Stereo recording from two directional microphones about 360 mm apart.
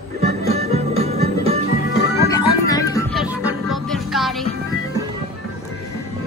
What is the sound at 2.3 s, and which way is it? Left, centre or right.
Music, centre.